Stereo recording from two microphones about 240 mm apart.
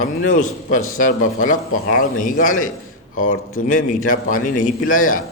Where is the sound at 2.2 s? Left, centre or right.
Left.